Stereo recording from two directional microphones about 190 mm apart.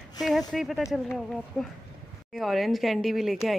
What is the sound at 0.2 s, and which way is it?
Speech, centre (ahead or behind).